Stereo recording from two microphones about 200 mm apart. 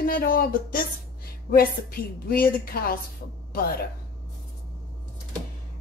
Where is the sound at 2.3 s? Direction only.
50° left (ahead or behind).